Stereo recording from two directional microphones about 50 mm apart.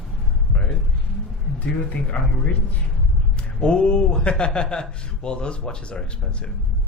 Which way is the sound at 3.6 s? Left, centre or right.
Centre.